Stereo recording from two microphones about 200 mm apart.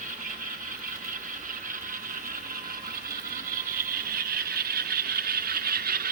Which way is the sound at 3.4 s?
45° right (ahead or behind).